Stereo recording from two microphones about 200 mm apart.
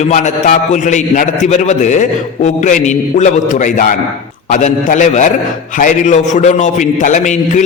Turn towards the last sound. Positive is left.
turn(degrees=35)  # may be behind; listen again after turning